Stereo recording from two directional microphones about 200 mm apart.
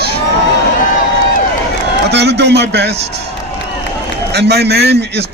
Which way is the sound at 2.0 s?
55° right (ahead or behind).